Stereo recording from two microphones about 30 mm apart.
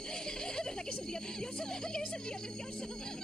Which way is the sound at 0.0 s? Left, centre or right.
Left.